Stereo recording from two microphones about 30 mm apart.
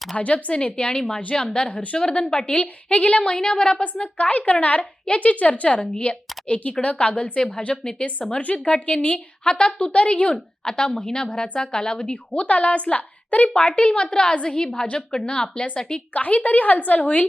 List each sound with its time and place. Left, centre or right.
0.2 s a woman's voice: left
0.9 s speech: left
1.7 s a woman's voice: left
2.0 s speech: left
2.5 s a woman's voice: left
3.3 s speech: left
3.9 s a woman's voice: left
10.6 s speech: left
12.0 s a woman's voice: left
14.0 s speech: left
16.1 s speech: left